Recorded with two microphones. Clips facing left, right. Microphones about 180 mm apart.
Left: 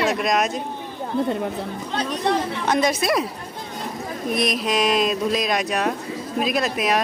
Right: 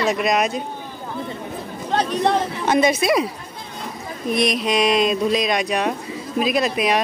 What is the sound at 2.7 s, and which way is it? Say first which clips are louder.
Speech: right 3 dB; centre (ahead or behind).